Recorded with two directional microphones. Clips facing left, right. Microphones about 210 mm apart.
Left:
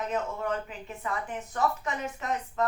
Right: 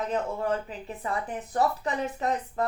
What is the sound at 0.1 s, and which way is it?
Speech, 35° right (ahead or behind).